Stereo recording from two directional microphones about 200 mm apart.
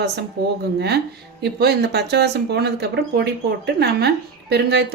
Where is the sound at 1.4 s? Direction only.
55° right (ahead or behind).